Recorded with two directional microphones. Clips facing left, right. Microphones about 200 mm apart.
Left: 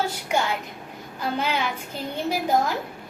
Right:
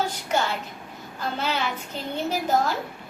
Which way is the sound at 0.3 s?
10° left (ahead or behind).